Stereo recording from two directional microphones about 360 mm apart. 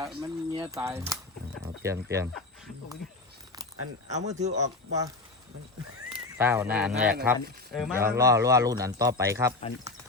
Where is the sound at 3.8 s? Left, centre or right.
Right.